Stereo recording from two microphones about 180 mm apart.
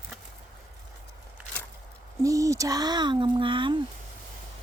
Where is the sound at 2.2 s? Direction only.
20° right (ahead or behind).